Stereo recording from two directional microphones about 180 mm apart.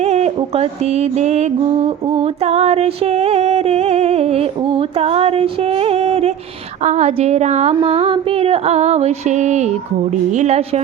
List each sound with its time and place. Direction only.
0.0 s music: 35° right (ahead or behind)